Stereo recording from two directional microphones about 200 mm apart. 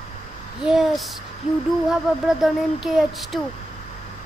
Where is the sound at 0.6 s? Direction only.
Centre (ahead or behind).